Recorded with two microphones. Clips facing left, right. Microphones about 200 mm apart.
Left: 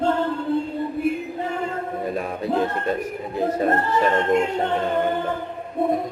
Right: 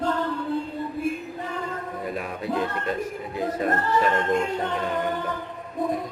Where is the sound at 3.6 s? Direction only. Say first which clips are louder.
Left 1 dB; 25° left (ahead or behind).